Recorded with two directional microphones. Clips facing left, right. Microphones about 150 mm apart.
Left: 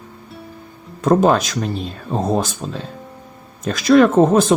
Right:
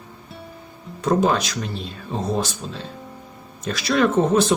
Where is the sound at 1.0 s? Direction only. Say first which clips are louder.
Left 5 dB; 50° left (ahead or behind).